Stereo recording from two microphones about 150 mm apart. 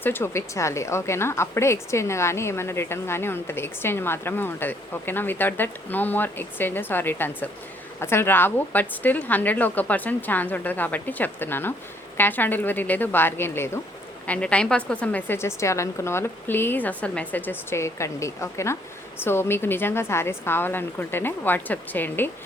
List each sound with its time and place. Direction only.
0.0 s a woman's voice: 15° left (ahead or behind)